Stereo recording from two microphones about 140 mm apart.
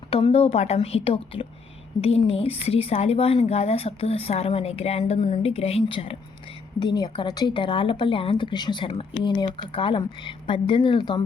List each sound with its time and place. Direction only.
0.1 s speech: 45° left (ahead or behind)
6.7 s speech: 30° left (ahead or behind)